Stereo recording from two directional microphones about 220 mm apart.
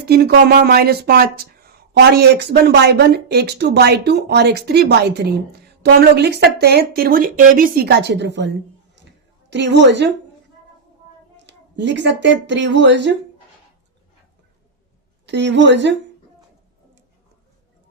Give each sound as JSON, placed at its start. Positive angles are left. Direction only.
{"t": 0.1, "sound": "speech", "side_deg": -45}
{"t": 11.4, "sound": "speech", "side_deg": -55}
{"t": 15.3, "sound": "speech", "side_deg": -55}